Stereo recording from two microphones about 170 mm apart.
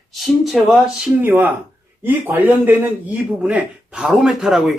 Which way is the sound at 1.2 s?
10° right (ahead or behind).